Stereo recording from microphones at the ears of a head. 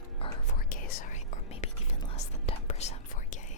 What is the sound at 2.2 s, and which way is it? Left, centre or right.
Whispering, left.